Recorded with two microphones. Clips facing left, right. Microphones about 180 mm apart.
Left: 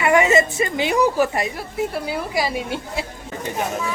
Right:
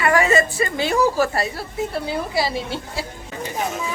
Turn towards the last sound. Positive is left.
turn(degrees=15)  # may be behind; listen again after turning